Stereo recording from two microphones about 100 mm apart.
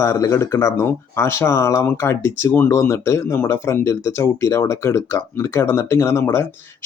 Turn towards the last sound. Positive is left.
turn(degrees=25)  # may be behind; listen again after turning